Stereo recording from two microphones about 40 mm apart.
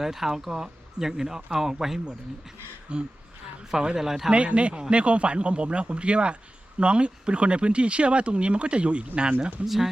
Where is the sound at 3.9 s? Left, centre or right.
Centre.